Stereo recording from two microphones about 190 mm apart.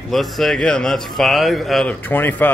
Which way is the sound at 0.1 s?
Centre (ahead or behind).